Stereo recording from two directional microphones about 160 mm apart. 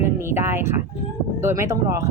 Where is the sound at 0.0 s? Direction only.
15° right (ahead or behind).